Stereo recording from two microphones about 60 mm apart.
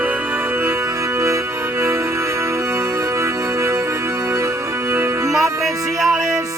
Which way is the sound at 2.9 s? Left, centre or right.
Right.